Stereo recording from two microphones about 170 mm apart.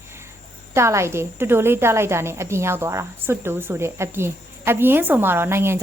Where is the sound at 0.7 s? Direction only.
15° right (ahead or behind).